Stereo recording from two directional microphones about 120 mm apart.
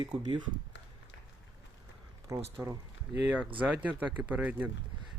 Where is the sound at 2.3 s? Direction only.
25° right (ahead or behind).